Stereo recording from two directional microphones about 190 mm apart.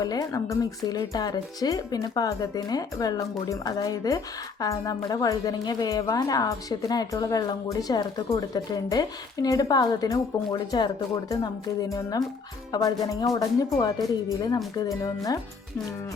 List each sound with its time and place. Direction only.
0.0 s a woman's voice: 20° left (ahead or behind)
14.8 s speech: 20° left (ahead or behind)